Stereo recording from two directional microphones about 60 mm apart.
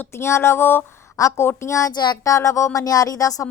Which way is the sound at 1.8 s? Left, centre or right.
Left.